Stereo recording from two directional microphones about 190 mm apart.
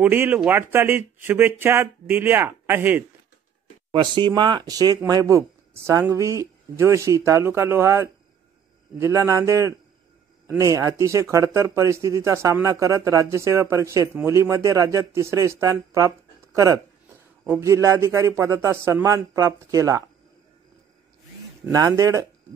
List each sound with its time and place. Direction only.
0.0 s speech: 10° right (ahead or behind)
3.9 s speech: 25° right (ahead or behind)
21.7 s speech: 20° right (ahead or behind)